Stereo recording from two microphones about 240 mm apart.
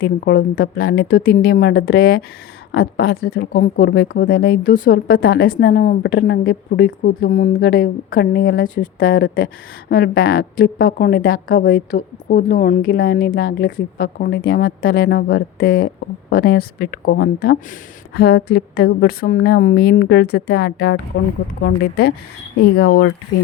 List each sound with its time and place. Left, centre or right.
0.0 s a woman's voice: left